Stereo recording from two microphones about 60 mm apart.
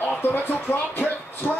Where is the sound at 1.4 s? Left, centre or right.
Centre.